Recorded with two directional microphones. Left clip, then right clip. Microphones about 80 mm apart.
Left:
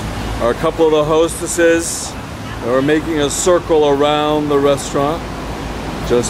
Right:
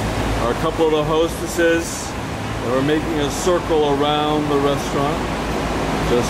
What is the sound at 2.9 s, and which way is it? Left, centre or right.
Speech, centre.